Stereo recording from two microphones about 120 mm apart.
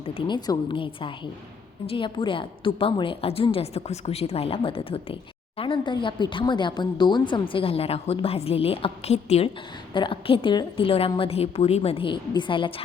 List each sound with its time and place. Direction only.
0.1 s a woman's voice: 40° left (ahead or behind); by 9.5 s 60° left (ahead or behind)
9.9 s speech: 45° left (ahead or behind)